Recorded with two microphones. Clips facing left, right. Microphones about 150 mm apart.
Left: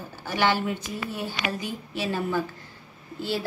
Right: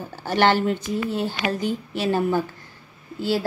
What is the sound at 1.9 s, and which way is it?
Speech, 60° right (ahead or behind).